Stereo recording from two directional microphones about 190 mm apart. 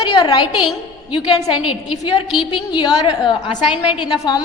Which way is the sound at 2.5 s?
25° left (ahead or behind).